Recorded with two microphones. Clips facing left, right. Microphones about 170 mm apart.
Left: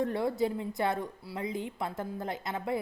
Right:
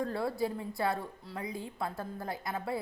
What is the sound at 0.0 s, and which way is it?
A woman's voice, 20° left (ahead or behind).